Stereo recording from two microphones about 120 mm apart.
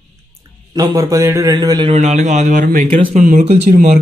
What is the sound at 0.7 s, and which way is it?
Speech, 25° right (ahead or behind).